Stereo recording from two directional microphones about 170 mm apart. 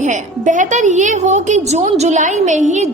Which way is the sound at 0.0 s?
45° right (ahead or behind).